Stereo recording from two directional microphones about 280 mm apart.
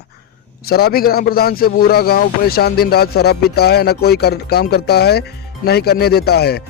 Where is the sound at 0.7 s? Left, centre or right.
Left.